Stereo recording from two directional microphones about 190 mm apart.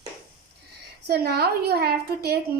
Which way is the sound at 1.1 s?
55° right (ahead or behind).